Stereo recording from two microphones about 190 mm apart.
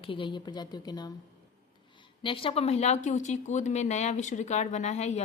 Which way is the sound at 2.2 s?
30° left (ahead or behind).